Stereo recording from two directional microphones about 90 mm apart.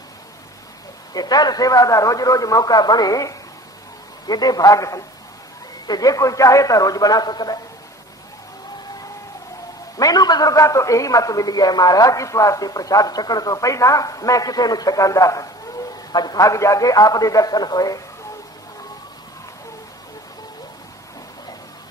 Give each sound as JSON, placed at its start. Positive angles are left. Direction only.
{"t": 1.1, "sound": "a man's voice", "side_deg": 50}
{"t": 9.9, "sound": "a man's voice", "side_deg": 45}